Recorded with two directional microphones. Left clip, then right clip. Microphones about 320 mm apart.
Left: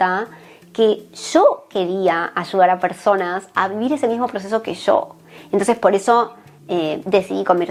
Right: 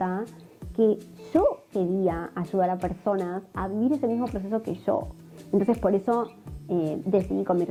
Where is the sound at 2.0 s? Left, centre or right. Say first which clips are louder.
Left 10 dB; centre.